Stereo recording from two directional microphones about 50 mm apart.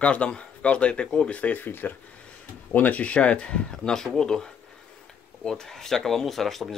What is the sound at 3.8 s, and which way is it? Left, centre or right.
Speech, centre.